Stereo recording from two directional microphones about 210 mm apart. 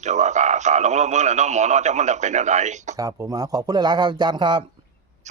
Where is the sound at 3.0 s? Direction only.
15° right (ahead or behind).